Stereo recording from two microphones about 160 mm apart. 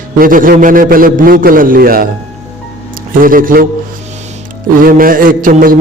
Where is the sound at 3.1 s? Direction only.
60° right (ahead or behind).